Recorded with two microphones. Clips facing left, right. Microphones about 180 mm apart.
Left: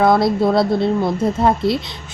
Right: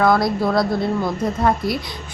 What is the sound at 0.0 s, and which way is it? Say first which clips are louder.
Speech: left 3 dB; 25° left (ahead or behind).